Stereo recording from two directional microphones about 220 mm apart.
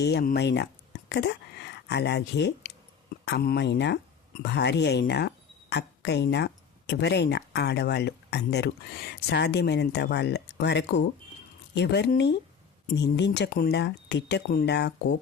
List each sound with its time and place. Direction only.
0.0 s speech: 45° left (ahead or behind)